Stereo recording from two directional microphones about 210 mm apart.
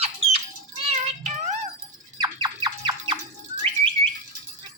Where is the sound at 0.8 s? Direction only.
30° right (ahead or behind).